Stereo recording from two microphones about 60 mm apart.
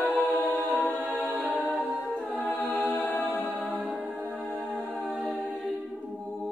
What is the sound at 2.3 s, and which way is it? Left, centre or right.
Music, left.